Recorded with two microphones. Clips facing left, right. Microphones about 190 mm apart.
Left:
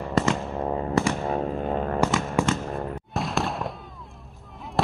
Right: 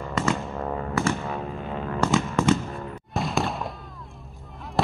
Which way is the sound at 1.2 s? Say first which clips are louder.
Left 5 dB; 40° left (ahead or behind).